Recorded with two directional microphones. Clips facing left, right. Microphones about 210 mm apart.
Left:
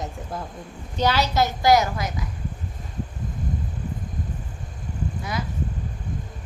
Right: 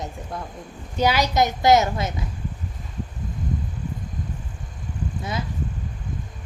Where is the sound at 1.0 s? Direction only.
10° right (ahead or behind).